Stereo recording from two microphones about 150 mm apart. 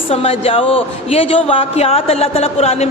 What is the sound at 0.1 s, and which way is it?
A man's voice, 40° left (ahead or behind).